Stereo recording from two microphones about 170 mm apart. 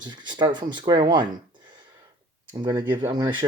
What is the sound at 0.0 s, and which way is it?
Speech, 25° right (ahead or behind).